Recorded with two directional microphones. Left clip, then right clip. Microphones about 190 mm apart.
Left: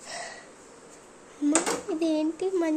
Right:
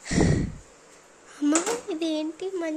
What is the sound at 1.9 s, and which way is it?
Speech, 10° right (ahead or behind).